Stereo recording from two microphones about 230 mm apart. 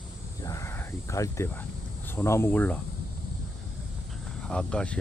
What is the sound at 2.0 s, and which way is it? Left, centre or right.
Speech, centre.